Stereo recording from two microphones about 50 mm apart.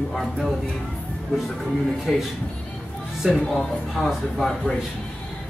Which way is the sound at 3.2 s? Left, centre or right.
Centre.